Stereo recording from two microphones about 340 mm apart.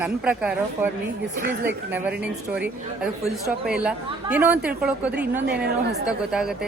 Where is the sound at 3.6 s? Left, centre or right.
Centre.